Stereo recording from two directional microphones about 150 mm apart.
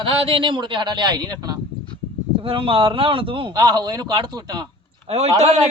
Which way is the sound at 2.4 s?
35° right (ahead or behind).